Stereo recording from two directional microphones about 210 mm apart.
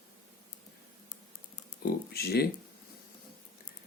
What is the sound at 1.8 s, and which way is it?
Speech, 50° left (ahead or behind).